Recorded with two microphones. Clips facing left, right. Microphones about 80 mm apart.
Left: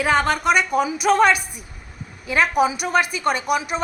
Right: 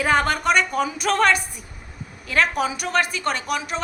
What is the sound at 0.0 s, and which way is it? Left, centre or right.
A woman's voice, centre.